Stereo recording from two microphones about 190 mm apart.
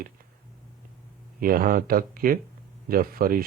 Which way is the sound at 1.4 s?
50° right (ahead or behind).